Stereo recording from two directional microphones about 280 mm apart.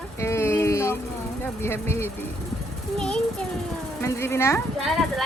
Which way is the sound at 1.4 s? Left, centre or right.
Centre.